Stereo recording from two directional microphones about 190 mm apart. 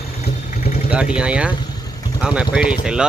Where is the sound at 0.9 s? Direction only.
5° right (ahead or behind).